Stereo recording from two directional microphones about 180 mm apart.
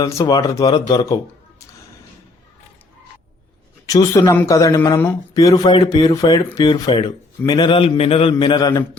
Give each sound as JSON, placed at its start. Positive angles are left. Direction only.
{"t": 0.0, "sound": "speech", "side_deg": 20}
{"t": 3.8, "sound": "speech", "side_deg": 20}